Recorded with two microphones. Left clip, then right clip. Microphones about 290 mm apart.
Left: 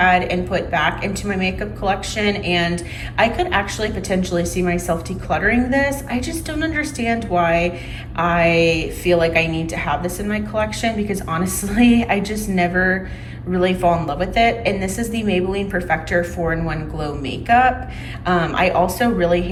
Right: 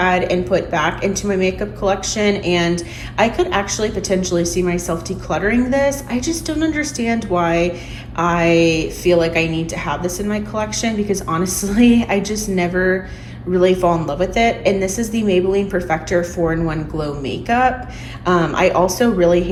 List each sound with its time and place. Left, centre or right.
0.0 s speech: centre